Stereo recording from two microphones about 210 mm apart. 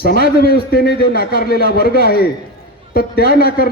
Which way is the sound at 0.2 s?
45° left (ahead or behind).